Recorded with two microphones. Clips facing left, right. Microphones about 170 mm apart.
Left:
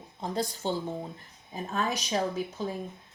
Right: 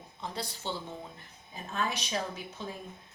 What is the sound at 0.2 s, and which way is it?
Speech, 45° left (ahead or behind).